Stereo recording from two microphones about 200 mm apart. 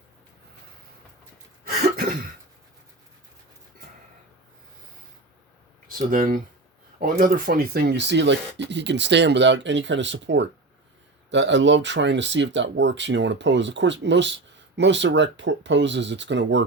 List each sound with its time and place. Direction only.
1.6 s cough: 50° right (ahead or behind)
6.1 s speech: 45° right (ahead or behind); by 16.6 s 65° right (ahead or behind)